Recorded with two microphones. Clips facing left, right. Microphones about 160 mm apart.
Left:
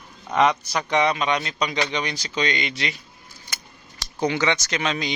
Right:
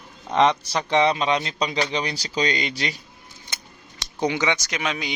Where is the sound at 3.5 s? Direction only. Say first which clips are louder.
Even; 25° right (ahead or behind).